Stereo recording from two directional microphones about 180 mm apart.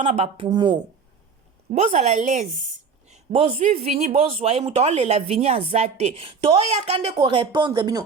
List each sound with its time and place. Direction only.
0.0 s speech: 30° right (ahead or behind)
1.7 s a woman's voice: 40° right (ahead or behind)
3.3 s speech: 30° right (ahead or behind)